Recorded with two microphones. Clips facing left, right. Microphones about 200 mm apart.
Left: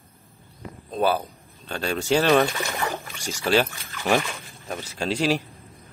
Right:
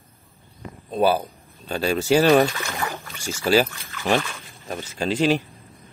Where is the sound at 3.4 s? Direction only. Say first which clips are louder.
Right 2 dB; centre (ahead or behind).